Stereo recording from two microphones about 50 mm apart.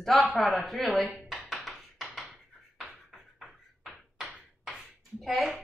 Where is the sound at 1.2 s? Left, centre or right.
Centre.